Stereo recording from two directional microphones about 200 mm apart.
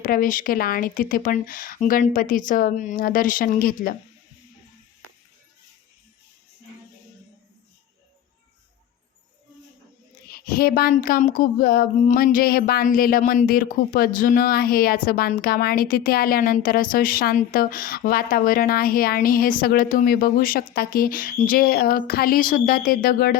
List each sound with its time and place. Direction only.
0.0 s speech: 45° left (ahead or behind)
10.3 s speech: 50° left (ahead or behind)